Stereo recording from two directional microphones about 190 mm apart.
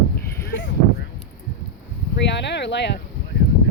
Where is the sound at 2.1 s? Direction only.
65° left (ahead or behind).